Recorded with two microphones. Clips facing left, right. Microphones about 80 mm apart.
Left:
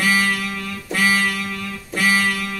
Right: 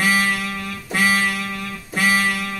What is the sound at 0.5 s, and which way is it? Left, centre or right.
Music, centre.